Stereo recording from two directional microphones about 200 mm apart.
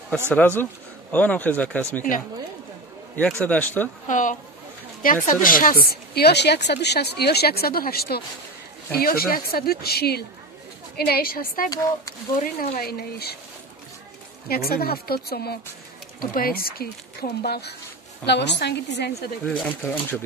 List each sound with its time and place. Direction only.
0.3 s speech: 10° left (ahead or behind)
3.4 s speech: 10° left (ahead or behind)
4.1 s a woman's voice: 40° left (ahead or behind)
14.5 s a woman's voice: 50° left (ahead or behind)
19.4 s speech: 5° left (ahead or behind)